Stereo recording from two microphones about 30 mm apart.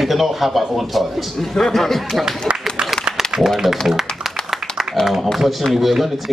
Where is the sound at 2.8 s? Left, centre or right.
Right.